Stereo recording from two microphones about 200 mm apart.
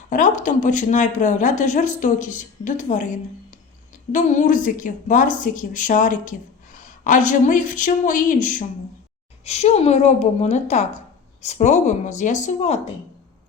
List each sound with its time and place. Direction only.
0.1 s speech: 40° left (ahead or behind)